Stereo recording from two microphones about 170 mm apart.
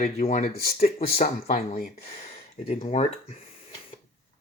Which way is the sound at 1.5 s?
55° left (ahead or behind).